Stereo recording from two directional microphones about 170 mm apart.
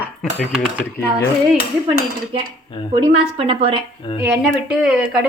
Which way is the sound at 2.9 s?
25° right (ahead or behind).